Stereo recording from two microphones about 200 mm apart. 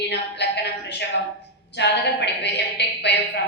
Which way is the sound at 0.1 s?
60° left (ahead or behind).